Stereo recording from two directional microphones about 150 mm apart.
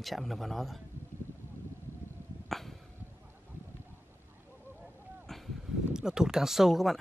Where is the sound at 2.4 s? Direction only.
Centre (ahead or behind).